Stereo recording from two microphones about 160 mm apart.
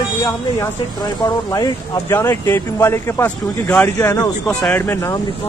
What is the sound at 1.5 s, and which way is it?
Speech, 20° left (ahead or behind).